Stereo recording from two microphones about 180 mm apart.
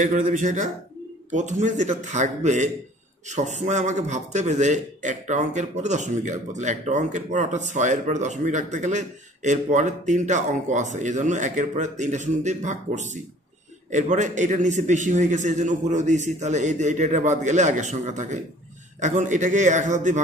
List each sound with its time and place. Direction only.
0.0 s a man's voice: 45° right (ahead or behind)